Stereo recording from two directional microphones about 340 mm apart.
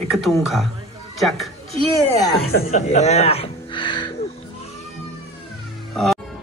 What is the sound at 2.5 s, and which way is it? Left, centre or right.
Music, centre.